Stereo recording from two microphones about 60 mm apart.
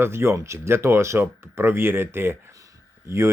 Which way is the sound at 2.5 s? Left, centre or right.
Right.